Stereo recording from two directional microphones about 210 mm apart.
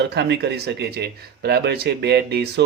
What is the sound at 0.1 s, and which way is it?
Speech, 55° right (ahead or behind).